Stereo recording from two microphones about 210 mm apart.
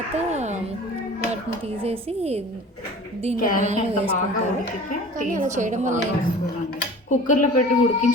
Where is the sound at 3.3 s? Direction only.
40° left (ahead or behind).